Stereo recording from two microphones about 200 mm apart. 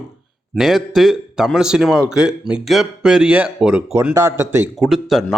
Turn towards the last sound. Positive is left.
turn(degrees=0)  # may be behind; listen again after turning